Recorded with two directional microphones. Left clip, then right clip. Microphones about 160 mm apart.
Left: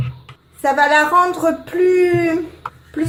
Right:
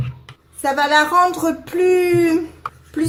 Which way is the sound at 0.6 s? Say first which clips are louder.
Left 2 dB; 10° right (ahead or behind).